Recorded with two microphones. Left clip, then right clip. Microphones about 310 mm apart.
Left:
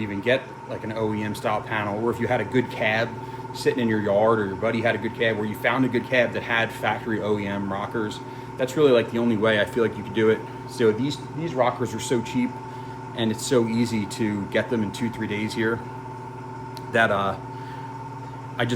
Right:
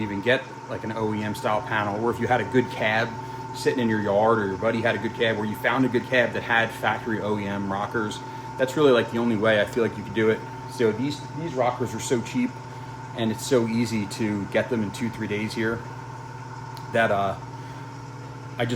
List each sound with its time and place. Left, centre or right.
0.0 s speech: centre
16.9 s speech: centre
18.6 s speech: centre